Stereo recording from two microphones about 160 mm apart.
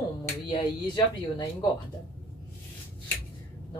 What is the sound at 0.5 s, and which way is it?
Speech, 25° left (ahead or behind).